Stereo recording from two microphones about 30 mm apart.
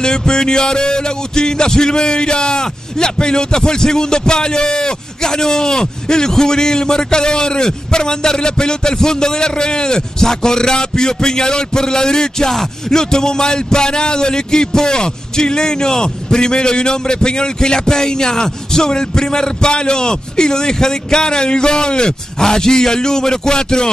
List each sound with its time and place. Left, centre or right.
0.0 s music: left